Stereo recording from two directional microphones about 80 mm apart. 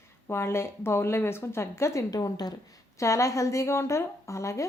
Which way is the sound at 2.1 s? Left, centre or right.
Left.